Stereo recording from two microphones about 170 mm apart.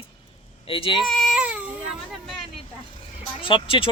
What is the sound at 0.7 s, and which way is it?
Speech, 30° left (ahead or behind).